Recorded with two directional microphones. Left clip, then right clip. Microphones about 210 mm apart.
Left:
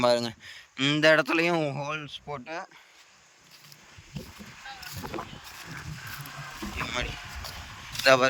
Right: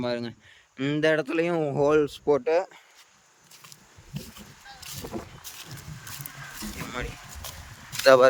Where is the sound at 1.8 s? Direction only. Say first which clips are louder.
Right 12 dB; 25° right (ahead or behind).